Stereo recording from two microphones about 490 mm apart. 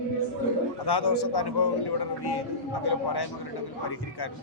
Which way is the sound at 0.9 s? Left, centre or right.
Left.